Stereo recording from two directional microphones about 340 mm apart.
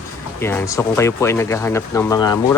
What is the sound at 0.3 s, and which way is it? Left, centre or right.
Speech, centre.